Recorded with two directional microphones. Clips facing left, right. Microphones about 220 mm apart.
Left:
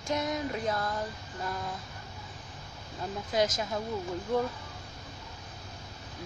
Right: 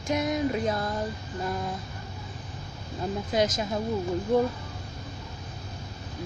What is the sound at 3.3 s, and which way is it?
Speech, 20° right (ahead or behind).